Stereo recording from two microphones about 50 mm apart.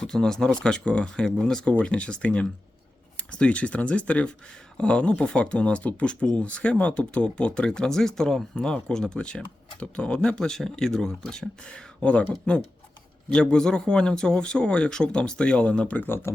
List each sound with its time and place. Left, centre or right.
0.1 s speech: centre
16.0 s speech: left